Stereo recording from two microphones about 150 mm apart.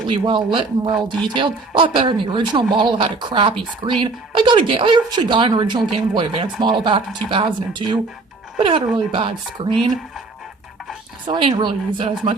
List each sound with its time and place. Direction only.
0.1 s speech: 35° right (ahead or behind)
11.3 s speech: 30° right (ahead or behind)